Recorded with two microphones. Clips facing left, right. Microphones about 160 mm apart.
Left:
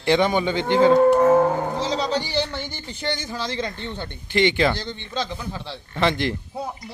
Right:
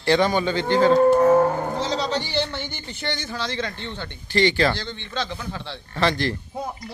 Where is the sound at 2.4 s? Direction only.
35° left (ahead or behind).